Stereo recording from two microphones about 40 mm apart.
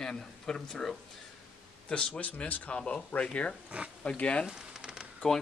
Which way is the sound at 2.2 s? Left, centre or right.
Left.